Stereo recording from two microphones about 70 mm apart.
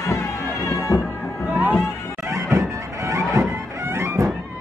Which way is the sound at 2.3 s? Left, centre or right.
Right.